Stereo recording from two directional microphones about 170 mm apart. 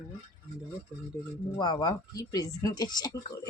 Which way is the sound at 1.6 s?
25° left (ahead or behind).